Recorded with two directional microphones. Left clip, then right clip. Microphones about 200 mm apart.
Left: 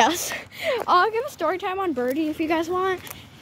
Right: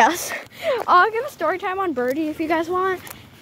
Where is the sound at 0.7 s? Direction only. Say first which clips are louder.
Right 4 dB; 10° left (ahead or behind).